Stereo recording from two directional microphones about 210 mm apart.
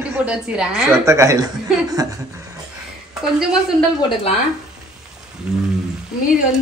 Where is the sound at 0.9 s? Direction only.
15° right (ahead or behind).